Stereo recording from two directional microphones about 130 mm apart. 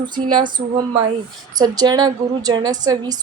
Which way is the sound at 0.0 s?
35° right (ahead or behind).